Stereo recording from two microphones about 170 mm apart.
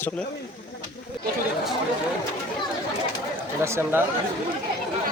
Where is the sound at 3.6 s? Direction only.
15° right (ahead or behind).